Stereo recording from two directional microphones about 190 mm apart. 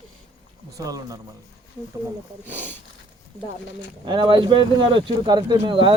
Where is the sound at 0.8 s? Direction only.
20° right (ahead or behind).